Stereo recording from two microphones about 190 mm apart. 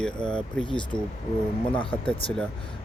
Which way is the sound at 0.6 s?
25° left (ahead or behind).